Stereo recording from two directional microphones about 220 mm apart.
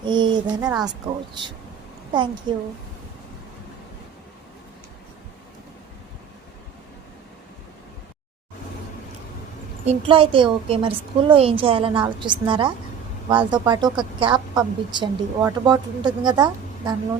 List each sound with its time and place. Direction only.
0.0 s a sound: 20° right (ahead or behind)
0.5 s a woman's voice: 20° right (ahead or behind)
2.5 s a woman's voice: 20° right (ahead or behind)
9.8 s a woman's voice: 25° right (ahead or behind)